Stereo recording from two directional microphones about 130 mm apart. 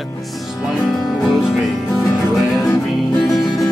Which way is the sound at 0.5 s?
Centre (ahead or behind).